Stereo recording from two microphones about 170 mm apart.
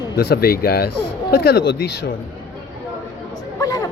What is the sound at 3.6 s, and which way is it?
Speech, 20° left (ahead or behind).